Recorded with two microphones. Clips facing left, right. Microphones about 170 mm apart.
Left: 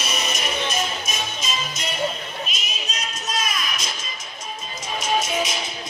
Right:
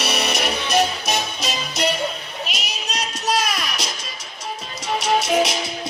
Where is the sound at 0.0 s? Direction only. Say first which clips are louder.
Right 5 dB; 70° right (ahead or behind).